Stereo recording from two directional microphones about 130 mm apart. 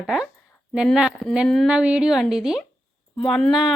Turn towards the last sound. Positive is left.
turn(degrees=0)  # may be behind; listen again after turning